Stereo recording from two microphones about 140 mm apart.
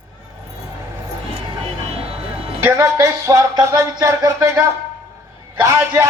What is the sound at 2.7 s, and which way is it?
A man's voice, 20° right (ahead or behind).